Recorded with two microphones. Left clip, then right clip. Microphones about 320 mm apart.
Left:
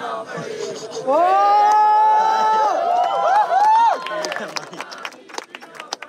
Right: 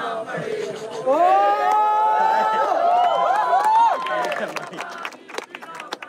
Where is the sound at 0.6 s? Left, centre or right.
Centre.